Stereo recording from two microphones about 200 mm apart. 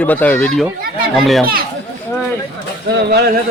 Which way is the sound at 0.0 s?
10° left (ahead or behind).